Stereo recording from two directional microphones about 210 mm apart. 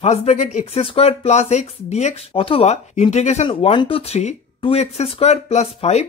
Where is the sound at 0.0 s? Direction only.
30° left (ahead or behind).